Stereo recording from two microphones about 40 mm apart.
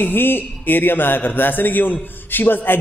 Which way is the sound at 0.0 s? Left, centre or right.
Left.